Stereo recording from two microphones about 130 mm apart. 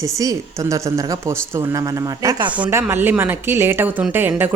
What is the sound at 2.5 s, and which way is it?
Speech, 15° right (ahead or behind).